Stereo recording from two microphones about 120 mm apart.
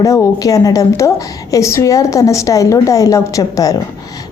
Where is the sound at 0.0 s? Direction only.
25° left (ahead or behind).